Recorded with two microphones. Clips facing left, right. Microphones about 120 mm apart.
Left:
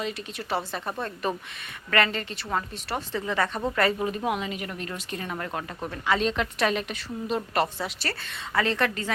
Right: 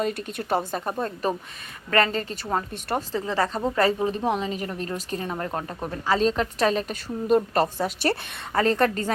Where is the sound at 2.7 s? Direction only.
50° right (ahead or behind).